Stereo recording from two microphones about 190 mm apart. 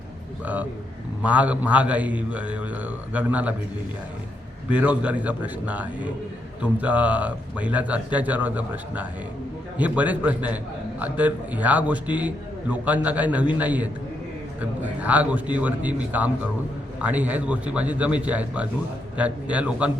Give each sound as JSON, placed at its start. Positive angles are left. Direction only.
{"t": 0.4, "sound": "a man's voice", "side_deg": -10}
{"t": 4.7, "sound": "a man's voice", "side_deg": -5}